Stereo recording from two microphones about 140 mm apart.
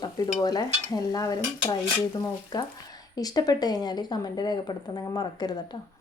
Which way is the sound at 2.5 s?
30° left (ahead or behind).